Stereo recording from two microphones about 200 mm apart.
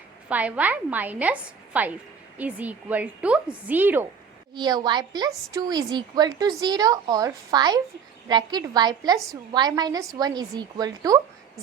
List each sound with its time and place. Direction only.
0.3 s a woman's voice: 5° right (ahead or behind)
4.5 s a woman's voice: 20° right (ahead or behind)